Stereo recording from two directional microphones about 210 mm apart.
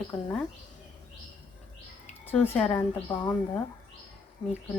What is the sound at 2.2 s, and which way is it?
A woman's voice, 10° left (ahead or behind).